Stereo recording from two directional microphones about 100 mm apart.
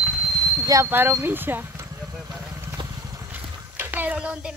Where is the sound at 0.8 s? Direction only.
20° right (ahead or behind).